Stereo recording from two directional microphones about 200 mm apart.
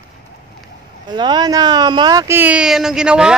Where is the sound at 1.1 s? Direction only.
20° right (ahead or behind).